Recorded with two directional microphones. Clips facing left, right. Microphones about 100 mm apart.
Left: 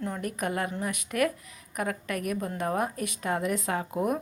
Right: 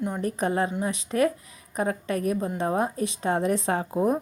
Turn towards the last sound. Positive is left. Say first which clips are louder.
# right 4 dB
turn(degrees=-30)  # may be behind; listen again after turning